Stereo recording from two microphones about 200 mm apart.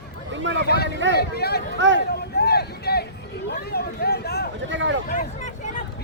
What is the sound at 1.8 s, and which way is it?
Speech, 65° right (ahead or behind).